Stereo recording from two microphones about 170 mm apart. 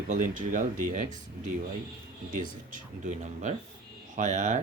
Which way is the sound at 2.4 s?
50° right (ahead or behind).